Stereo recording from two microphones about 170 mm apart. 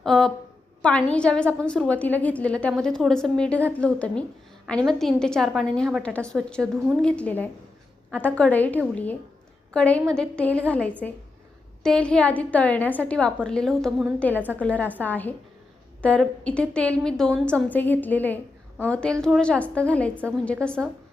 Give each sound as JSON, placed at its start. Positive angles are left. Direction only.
{"t": 0.0, "sound": "a woman's voice", "side_deg": 0}